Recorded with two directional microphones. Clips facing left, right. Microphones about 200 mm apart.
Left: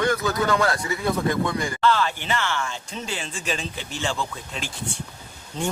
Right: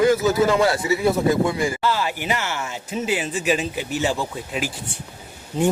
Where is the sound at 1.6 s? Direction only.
10° right (ahead or behind).